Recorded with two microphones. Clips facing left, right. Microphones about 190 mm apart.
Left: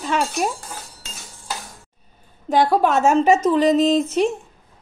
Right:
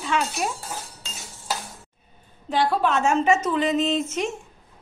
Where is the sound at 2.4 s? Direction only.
45° left (ahead or behind).